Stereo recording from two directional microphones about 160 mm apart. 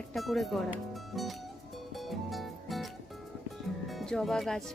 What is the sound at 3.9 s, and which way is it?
Speech, centre (ahead or behind).